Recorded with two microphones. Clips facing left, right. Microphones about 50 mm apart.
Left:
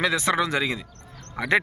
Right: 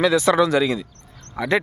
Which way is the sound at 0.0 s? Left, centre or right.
Left.